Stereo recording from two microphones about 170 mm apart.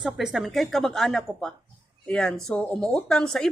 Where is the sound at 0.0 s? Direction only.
Centre (ahead or behind).